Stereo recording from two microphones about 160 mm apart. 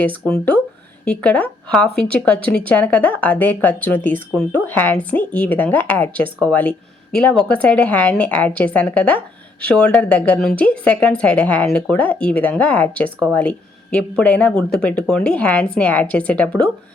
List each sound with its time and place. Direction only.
0.0 s a woman's voice: 10° left (ahead or behind)